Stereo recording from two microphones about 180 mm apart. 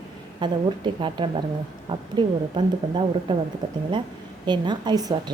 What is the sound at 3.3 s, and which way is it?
Speech, 25° right (ahead or behind).